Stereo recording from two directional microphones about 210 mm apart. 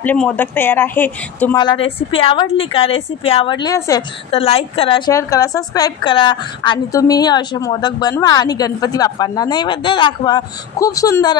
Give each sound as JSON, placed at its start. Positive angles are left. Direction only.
{"t": 0.0, "sound": "speech", "side_deg": 5}
{"t": 1.6, "sound": "a woman's voice", "side_deg": 25}
{"t": 4.3, "sound": "a woman's voice", "side_deg": 25}